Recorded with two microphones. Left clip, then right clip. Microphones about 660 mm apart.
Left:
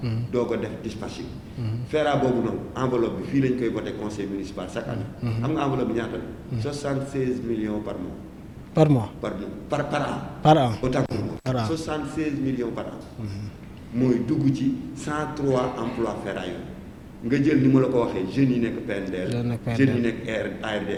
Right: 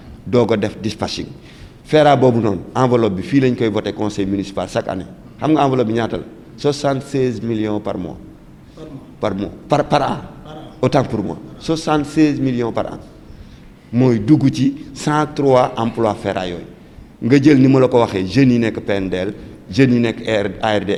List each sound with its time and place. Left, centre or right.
0.3 s a man's voice: right
9.2 s a man's voice: right
10.4 s a man's voice: left
10.8 s a man's voice: right
14.0 s a man's voice: right